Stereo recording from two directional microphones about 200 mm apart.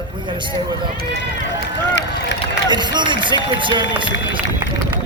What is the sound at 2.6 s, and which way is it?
Speech, 20° right (ahead or behind).